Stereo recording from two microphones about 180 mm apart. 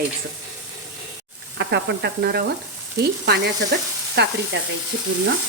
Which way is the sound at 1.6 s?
65° right (ahead or behind).